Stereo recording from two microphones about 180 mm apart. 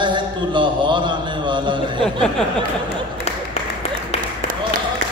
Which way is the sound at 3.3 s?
35° left (ahead or behind).